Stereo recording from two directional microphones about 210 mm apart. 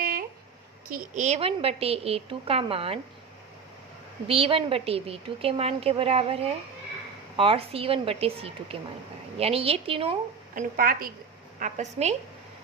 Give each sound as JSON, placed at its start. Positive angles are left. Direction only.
{"t": 0.0, "sound": "a sound", "side_deg": -45}
{"t": 0.9, "sound": "a woman's voice", "side_deg": -40}
{"t": 4.3, "sound": "a woman's voice", "side_deg": -25}
{"t": 10.5, "sound": "speech", "side_deg": -45}
{"t": 11.6, "sound": "a woman's voice", "side_deg": -30}